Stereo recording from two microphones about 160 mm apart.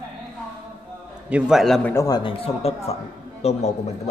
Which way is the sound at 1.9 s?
20° left (ahead or behind).